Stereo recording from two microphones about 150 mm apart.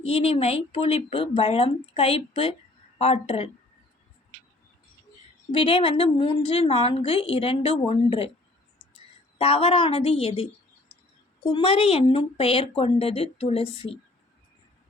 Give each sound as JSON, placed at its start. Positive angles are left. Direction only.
{"t": 0.0, "sound": "a woman's voice", "side_deg": 40}
{"t": 5.5, "sound": "a woman's voice", "side_deg": 35}
{"t": 9.4, "sound": "a woman's voice", "side_deg": 40}
{"t": 11.5, "sound": "a woman's voice", "side_deg": 40}